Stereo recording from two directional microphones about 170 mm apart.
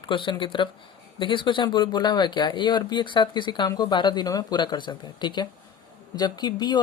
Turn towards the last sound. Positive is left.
turn(degrees=25)  # may be behind; listen again after turning